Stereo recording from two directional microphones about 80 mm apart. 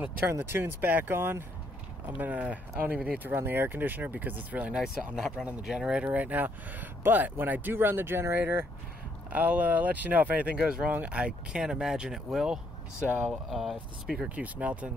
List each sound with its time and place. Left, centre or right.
0.2 s speech: right; by 6.0 s centre
6.0 s speech: centre
14.3 s speech: centre